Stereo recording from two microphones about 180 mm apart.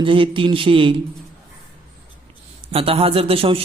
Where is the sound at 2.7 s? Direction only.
35° right (ahead or behind).